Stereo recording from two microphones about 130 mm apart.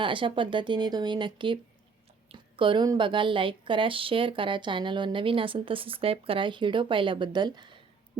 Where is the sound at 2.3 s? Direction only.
40° right (ahead or behind).